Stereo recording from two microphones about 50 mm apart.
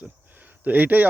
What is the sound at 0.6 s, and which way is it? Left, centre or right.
Speech, right.